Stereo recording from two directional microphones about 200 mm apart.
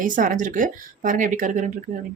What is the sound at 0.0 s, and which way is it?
Speech, 40° right (ahead or behind).